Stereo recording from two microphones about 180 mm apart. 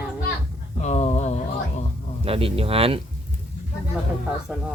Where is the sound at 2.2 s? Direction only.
30° right (ahead or behind).